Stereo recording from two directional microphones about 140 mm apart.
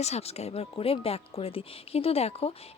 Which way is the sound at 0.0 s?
50° left (ahead or behind).